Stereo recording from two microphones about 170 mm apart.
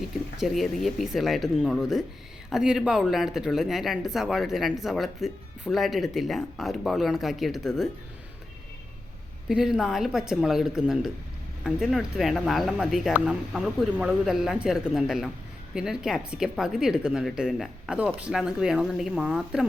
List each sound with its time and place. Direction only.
0.3 s speech: centre (ahead or behind)
9.5 s speech: centre (ahead or behind)